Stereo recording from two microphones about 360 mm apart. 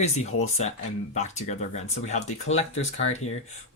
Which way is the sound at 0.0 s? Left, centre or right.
Centre.